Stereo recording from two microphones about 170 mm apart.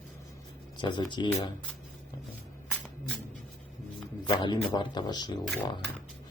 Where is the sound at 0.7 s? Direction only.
25° left (ahead or behind).